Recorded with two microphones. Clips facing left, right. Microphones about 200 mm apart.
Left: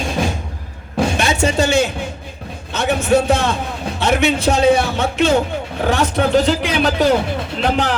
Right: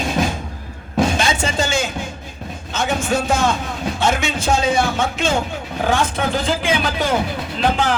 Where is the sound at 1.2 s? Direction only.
65° left (ahead or behind).